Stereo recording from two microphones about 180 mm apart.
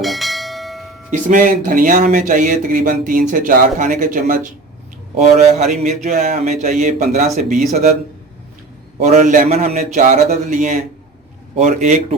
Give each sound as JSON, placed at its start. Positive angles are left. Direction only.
{"t": 0.0, "sound": "bell", "side_deg": 0}
{"t": 1.3, "sound": "speech", "side_deg": -50}
{"t": 9.0, "sound": "speech", "side_deg": -40}